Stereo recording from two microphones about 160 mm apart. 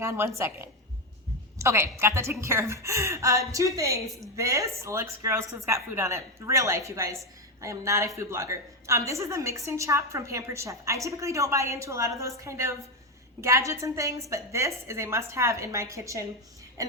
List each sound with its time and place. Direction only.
0.0 s a woman's voice: 20° right (ahead or behind)